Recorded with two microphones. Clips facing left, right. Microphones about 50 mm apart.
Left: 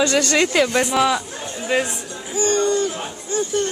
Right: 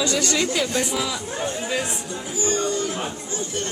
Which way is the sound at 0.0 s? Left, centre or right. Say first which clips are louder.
Left 5 dB; left.